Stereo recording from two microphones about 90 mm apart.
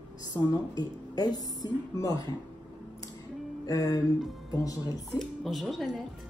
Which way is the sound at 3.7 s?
40° left (ahead or behind).